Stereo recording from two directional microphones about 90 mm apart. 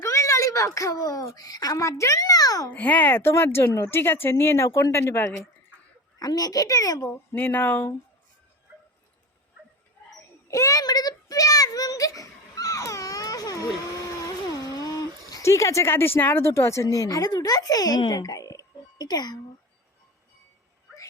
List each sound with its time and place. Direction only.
0.0 s speech: 35° left (ahead or behind)
2.6 s speech: 15° left (ahead or behind)
6.1 s a child's voice: 45° left (ahead or behind)
7.3 s speech: 20° left (ahead or behind)
10.5 s a sound: 40° left (ahead or behind)
15.3 s a child's voice: 35° left (ahead or behind)